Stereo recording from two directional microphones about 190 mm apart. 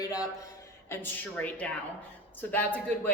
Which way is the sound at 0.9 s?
10° left (ahead or behind).